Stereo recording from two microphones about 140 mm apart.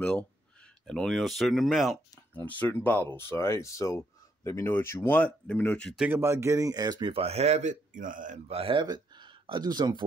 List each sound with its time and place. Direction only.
0.0 s speech: 5° left (ahead or behind)
2.3 s speech: 10° left (ahead or behind)
5.9 s speech: 10° right (ahead or behind)
6.2 s a man's voice: 20° right (ahead or behind); by 8.4 s 70° right (ahead or behind)
8.5 s speech: 40° right (ahead or behind)
8.8 s speech: 30° right (ahead or behind)